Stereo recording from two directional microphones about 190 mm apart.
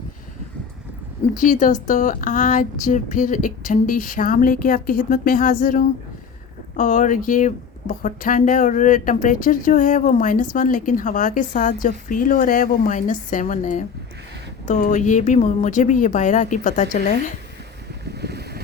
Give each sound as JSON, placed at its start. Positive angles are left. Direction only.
{"t": 1.4, "sound": "a woman's voice", "side_deg": 40}
{"t": 18.0, "sound": "boat", "side_deg": -60}